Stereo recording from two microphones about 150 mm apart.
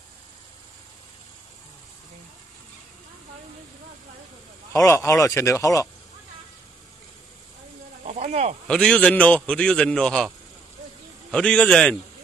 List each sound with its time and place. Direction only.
4.7 s speech: 20° left (ahead or behind)
8.0 s snake: 50° right (ahead or behind)
8.6 s a man's voice: 5° left (ahead or behind)